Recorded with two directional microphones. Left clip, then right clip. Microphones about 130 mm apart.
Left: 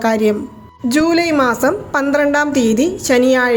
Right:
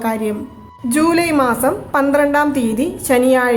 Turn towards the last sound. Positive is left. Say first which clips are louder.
# left 1 dB
turn(degrees=25)  # may be behind; listen again after turning